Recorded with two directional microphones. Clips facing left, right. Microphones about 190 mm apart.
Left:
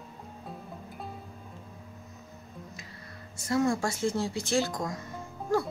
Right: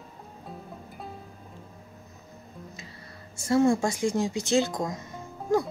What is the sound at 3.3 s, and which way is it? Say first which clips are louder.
Speech: right 5 dB; 25° right (ahead or behind).